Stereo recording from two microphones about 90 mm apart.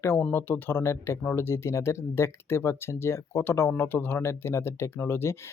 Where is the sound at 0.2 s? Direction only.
20° left (ahead or behind).